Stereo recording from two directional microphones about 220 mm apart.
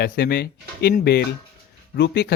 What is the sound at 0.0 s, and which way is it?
Speech, 45° left (ahead or behind).